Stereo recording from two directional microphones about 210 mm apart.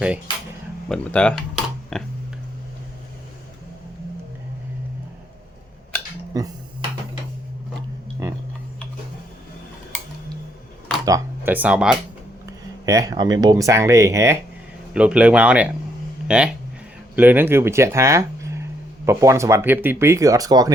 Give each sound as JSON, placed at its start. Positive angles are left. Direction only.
{"t": 0.9, "sound": "a sound", "side_deg": 5}
{"t": 6.3, "sound": "speech", "side_deg": -15}
{"t": 11.0, "sound": "speech", "side_deg": -15}
{"t": 12.8, "sound": "speech", "side_deg": -15}